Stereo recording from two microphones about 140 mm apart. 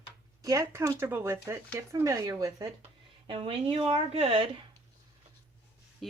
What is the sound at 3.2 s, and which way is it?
Speech, 40° right (ahead or behind).